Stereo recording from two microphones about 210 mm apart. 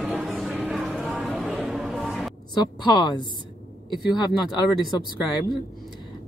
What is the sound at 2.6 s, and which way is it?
Speech, 20° left (ahead or behind).